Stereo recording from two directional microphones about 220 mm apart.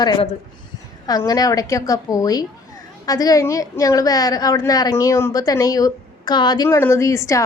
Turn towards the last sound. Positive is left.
turn(degrees=15)  # may be behind; listen again after turning